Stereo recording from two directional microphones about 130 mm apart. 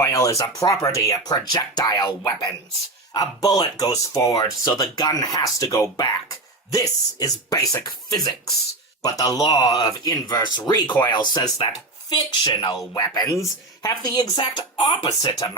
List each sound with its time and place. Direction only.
0.0 s speech: 25° left (ahead or behind)
9.0 s speech: 25° left (ahead or behind)